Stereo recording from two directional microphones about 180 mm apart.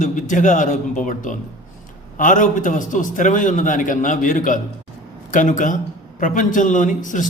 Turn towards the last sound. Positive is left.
turn(degrees=45)  # may be behind; listen again after turning